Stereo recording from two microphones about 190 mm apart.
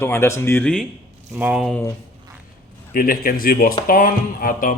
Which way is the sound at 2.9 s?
50° left (ahead or behind).